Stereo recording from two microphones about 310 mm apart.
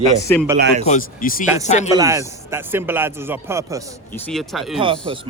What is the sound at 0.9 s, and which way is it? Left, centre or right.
Speech, left.